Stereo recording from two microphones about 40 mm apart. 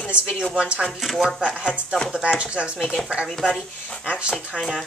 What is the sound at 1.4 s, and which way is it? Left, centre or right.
Speech, right.